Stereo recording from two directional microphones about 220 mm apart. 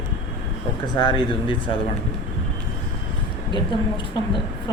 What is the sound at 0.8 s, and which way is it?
Speech, 20° left (ahead or behind).